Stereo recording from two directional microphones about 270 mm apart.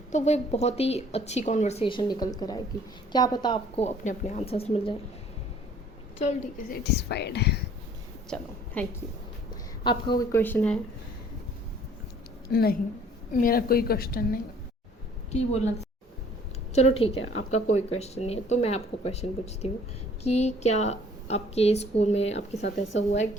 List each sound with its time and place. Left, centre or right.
0.1 s speech: left
6.1 s speech: left
8.3 s a woman's voice: centre
9.8 s speech: centre
12.5 s a woman's voice: left
16.7 s speech: left